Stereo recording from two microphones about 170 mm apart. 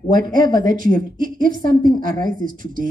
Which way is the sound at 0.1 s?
55° right (ahead or behind).